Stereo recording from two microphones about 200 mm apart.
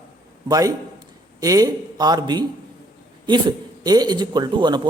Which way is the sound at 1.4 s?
20° right (ahead or behind).